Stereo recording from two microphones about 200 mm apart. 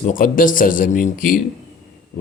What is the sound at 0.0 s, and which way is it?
A man's voice, 45° left (ahead or behind).